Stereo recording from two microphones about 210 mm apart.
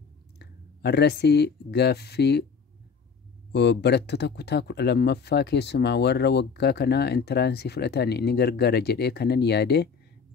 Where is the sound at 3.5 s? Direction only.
55° left (ahead or behind).